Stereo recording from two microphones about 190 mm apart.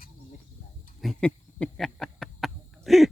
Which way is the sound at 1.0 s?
5° left (ahead or behind).